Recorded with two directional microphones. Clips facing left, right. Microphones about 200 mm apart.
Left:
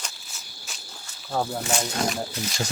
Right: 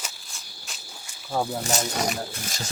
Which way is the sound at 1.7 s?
40° right (ahead or behind).